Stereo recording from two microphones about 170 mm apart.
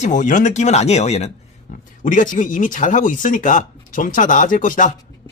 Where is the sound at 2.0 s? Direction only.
50° left (ahead or behind).